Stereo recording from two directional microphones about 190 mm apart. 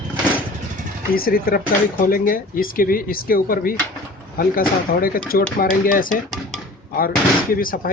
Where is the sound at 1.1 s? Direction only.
50° left (ahead or behind).